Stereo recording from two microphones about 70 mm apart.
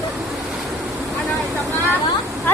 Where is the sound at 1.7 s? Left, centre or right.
Left.